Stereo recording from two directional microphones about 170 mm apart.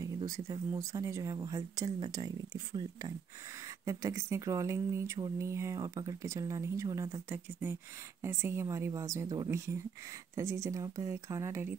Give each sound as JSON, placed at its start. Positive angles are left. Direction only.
{"t": 0.0, "sound": "speech", "side_deg": -25}